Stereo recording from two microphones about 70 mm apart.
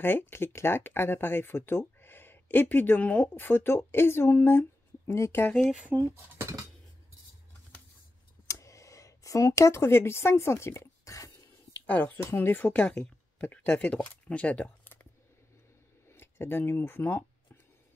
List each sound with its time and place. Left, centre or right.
0.0 s speech: left
5.6 s speech: centre
5.9 s speech: right
8.5 s a sound: left
11.8 s speech: left
12.2 s speech: left
12.7 s speech: centre
16.1 s speech: left